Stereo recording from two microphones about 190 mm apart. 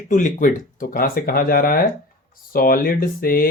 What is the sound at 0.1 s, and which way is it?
Speech, 40° left (ahead or behind).